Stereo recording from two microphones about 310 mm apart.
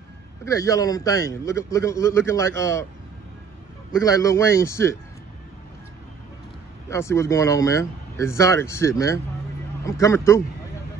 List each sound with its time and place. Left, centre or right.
0.5 s a man's voice: centre
4.0 s a man's voice: centre
6.9 s a man's voice: centre